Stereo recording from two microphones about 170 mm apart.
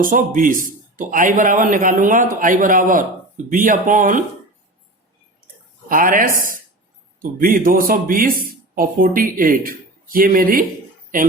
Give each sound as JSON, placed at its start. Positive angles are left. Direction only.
{"t": 0.0, "sound": "a man's voice", "side_deg": -55}
{"t": 5.9, "sound": "a man's voice", "side_deg": -55}